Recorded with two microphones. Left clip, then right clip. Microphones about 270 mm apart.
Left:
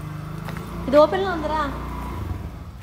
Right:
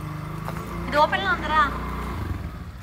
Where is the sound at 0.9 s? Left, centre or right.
Centre.